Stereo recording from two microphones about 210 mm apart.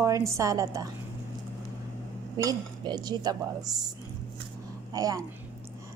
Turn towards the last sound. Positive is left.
turn(degrees=-15)  # may be behind; listen again after turning